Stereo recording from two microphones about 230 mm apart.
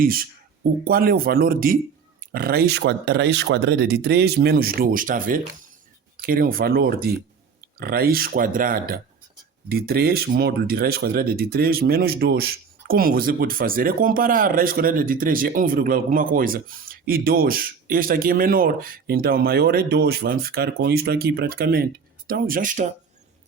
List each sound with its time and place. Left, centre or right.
0.0 s speech: right